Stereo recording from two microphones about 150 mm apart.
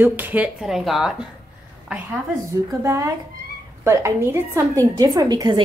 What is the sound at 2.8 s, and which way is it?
A woman's voice, 20° right (ahead or behind).